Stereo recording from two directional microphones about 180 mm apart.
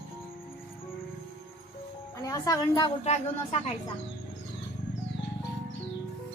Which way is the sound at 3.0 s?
40° left (ahead or behind).